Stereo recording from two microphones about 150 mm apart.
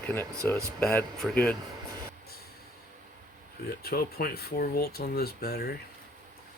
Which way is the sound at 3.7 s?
90° left.